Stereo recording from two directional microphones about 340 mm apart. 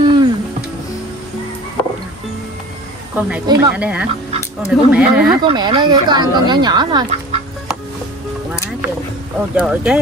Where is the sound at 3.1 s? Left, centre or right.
Centre.